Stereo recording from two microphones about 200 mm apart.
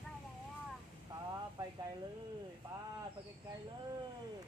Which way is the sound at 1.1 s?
20° right (ahead or behind).